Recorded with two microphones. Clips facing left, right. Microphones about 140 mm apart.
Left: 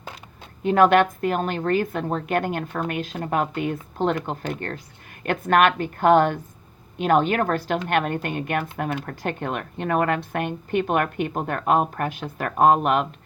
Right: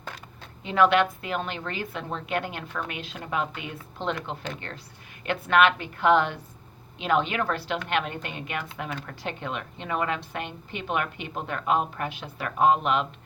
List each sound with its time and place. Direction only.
0.6 s a woman's voice: 50° left (ahead or behind)